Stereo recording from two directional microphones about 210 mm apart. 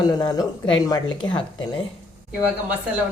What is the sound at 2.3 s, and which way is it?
Speech, 10° right (ahead or behind).